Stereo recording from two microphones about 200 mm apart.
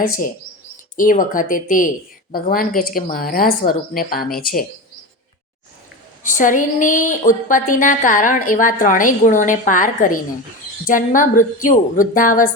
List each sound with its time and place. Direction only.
0.9 s speech: 40° left (ahead or behind)
6.2 s a woman's voice: 40° left (ahead or behind)